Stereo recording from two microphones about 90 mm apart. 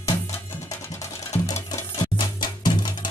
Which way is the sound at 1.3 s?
40° left (ahead or behind).